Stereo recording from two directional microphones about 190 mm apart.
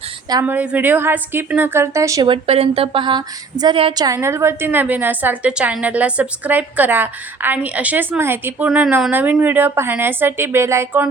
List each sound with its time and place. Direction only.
0.3 s a woman's voice: 20° right (ahead or behind)
0.5 s speech: 10° right (ahead or behind)